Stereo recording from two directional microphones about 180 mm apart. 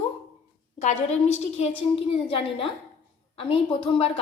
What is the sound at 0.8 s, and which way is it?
Speech, 40° left (ahead or behind).